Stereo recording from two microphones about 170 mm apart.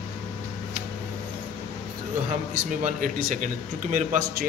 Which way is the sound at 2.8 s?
50° right (ahead or behind).